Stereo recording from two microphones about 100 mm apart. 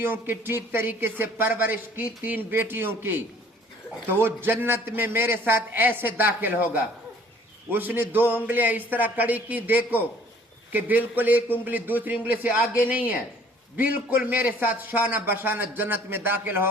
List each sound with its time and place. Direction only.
0.0 s a man's voice: 20° right (ahead or behind)